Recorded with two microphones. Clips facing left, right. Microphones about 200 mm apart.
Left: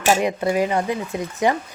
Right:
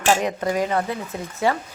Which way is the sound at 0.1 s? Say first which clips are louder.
Left 2 dB; 10° left (ahead or behind).